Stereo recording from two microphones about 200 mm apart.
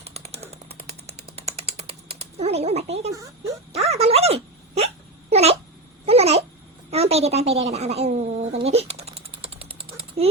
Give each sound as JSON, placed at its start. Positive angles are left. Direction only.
{"t": 0.0, "sound": "a sound", "side_deg": -30}
{"t": 3.7, "sound": "speech", "side_deg": -30}
{"t": 5.3, "sound": "babbling", "side_deg": -30}
{"t": 6.9, "sound": "speech", "side_deg": -30}
{"t": 8.6, "sound": "typewriter", "side_deg": -30}